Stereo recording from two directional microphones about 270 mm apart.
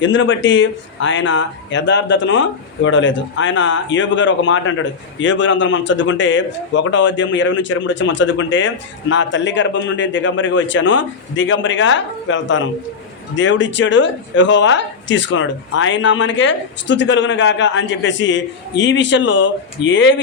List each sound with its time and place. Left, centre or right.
0.0 s speech: left